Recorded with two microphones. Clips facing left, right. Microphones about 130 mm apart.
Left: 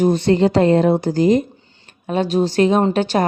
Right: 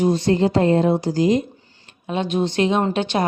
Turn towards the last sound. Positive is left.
turn(degrees=40)  # may be behind; listen again after turning